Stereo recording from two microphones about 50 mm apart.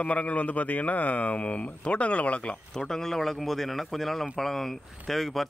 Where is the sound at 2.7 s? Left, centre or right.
Centre.